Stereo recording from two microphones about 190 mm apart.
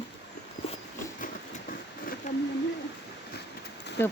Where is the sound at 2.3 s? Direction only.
40° left (ahead or behind).